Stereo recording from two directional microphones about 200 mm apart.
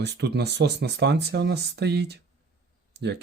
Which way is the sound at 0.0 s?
55° right (ahead or behind).